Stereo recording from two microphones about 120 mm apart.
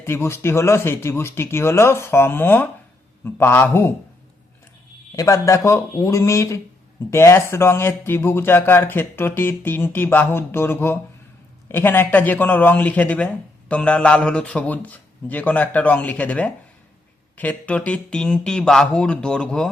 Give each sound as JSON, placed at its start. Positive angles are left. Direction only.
{"t": 0.0, "sound": "speech", "side_deg": 20}
{"t": 5.1, "sound": "speech", "side_deg": 25}